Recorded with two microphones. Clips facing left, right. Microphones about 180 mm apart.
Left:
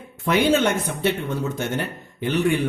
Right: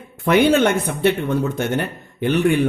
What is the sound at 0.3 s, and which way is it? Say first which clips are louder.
Speech: right 4 dB; 60° right (ahead or behind).